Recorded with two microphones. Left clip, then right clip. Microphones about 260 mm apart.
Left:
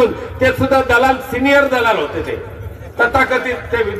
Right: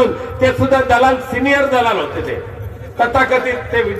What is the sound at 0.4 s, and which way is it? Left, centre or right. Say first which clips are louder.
A man's voice: even; left.